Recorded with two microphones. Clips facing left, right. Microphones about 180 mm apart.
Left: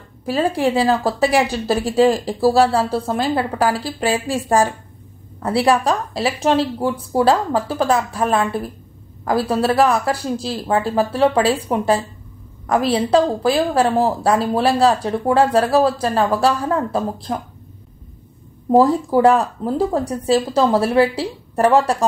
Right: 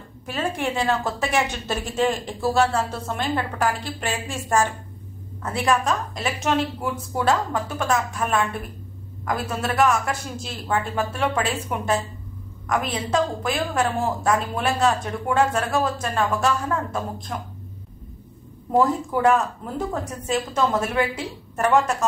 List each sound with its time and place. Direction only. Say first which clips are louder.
0.2 s speech: left 8 dB; 35° left (ahead or behind)
18.7 s speech: left 6 dB; 35° left (ahead or behind)